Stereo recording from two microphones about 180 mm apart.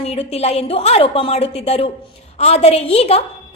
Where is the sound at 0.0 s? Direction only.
35° left (ahead or behind).